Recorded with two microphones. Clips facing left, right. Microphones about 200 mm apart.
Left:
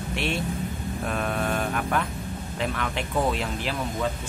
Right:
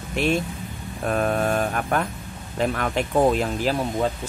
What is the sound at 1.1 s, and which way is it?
Speech, 45° right (ahead or behind).